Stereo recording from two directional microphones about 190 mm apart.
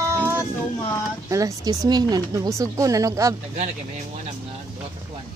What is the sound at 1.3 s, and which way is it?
Speech, 20° right (ahead or behind).